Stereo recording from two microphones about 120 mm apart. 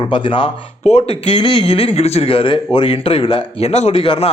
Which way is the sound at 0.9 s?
65° left (ahead or behind).